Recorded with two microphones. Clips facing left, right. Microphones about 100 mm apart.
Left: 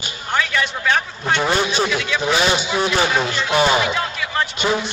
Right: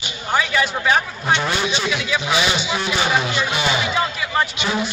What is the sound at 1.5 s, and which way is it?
Speech, 40° left (ahead or behind).